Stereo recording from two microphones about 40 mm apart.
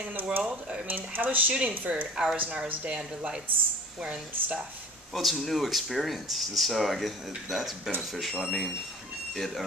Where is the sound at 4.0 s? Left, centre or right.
Centre.